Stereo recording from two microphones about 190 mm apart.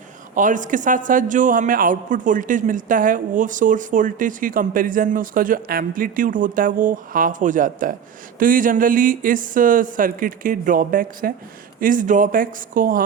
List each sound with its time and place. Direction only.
0.3 s a woman's voice: 45° right (ahead or behind)